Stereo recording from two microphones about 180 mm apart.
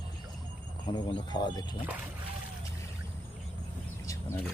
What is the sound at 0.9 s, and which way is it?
Speech, 25° left (ahead or behind).